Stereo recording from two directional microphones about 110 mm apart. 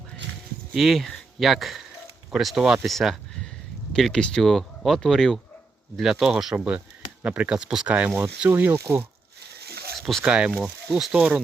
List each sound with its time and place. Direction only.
0.7 s speech: centre (ahead or behind); by 9.0 s 20° right (ahead or behind)
10.0 s speech: 5° left (ahead or behind)
10.2 s speech: 10° right (ahead or behind)